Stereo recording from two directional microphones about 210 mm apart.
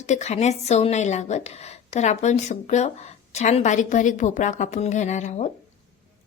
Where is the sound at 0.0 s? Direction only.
35° left (ahead or behind).